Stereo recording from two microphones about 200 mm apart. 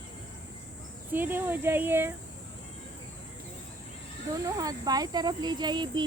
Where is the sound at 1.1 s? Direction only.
10° right (ahead or behind).